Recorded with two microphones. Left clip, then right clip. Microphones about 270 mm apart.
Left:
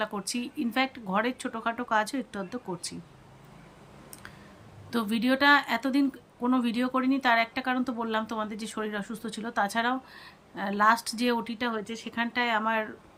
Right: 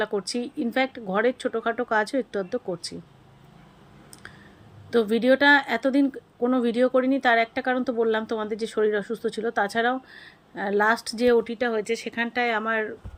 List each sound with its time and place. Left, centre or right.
0.0 s speech: centre
4.9 s speech: centre
11.8 s speech: left
12.0 s speech: centre